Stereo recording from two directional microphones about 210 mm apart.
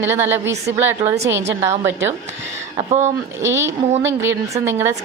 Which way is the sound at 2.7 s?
30° right (ahead or behind).